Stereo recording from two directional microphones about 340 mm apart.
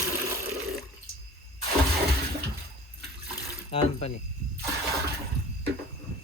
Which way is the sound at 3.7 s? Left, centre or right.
Centre.